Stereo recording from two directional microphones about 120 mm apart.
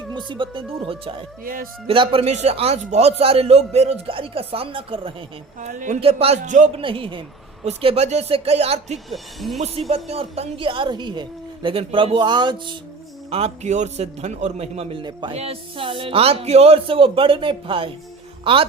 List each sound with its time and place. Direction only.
0.1 s a woman's voice: 40° right (ahead or behind)
2.3 s a man's voice: 65° right (ahead or behind); by 5.1 s 50° right (ahead or behind)
5.5 s a man's voice: 90° right
6.0 s a woman's voice: 55° right (ahead or behind)
6.4 s a man's voice: 90° right
6.7 s a woman's voice: 50° right (ahead or behind)
7.6 s a man's voice: 60° right (ahead or behind)
9.0 s speech: centre (ahead or behind)
9.9 s a woman's voice: 55° right (ahead or behind); by 12.7 s 40° right (ahead or behind)
13.3 s a man's voice: 65° right (ahead or behind)
15.0 s speech: 40° right (ahead or behind)
15.4 s a woman's voice: 50° right (ahead or behind)